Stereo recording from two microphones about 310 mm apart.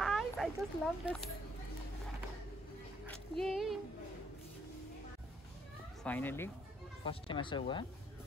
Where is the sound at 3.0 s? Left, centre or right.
Centre.